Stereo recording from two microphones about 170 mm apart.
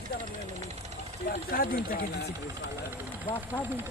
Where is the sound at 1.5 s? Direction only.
60° left (ahead or behind).